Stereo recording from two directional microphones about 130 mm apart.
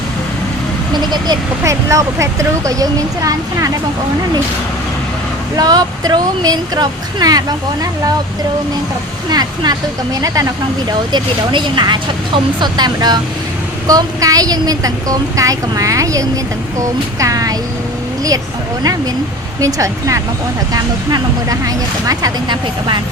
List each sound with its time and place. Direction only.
1.1 s speech: 30° right (ahead or behind)
5.5 s speech: 30° right (ahead or behind)
9.3 s speech: 30° right (ahead or behind)
19.5 s speech: 25° right (ahead or behind)